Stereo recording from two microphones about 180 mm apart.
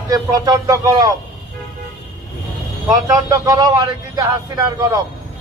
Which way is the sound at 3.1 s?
20° right (ahead or behind).